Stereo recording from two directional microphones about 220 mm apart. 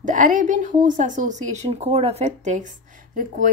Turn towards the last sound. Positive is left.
turn(degrees=-35)  # may be behind; listen again after turning